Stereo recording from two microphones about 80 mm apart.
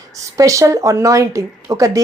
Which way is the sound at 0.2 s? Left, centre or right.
Right.